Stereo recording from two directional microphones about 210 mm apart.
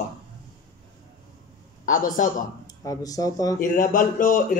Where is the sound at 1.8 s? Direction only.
40° left (ahead or behind).